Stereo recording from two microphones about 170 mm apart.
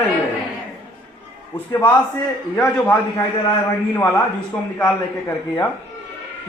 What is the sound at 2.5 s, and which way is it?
A man's voice, 10° left (ahead or behind).